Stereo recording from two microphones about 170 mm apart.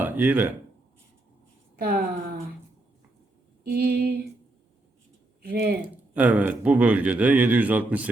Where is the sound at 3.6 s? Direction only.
65° right (ahead or behind).